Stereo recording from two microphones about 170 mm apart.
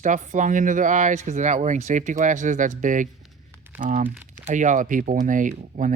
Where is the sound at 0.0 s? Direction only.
50° right (ahead or behind).